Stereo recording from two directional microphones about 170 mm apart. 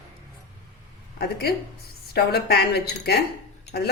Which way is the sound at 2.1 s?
70° left (ahead or behind).